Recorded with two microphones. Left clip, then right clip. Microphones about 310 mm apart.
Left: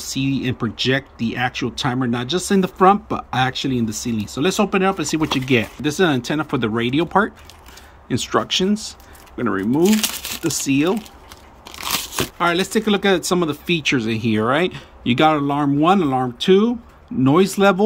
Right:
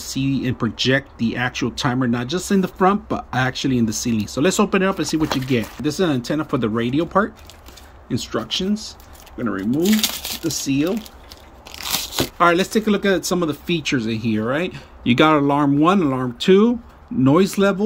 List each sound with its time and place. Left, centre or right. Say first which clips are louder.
0.1 s speech: even; centre
12.2 s speech: right 4 dB; centre